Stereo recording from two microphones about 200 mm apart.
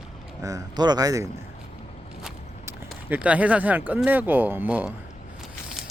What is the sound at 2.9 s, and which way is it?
Speech, 5° right (ahead or behind).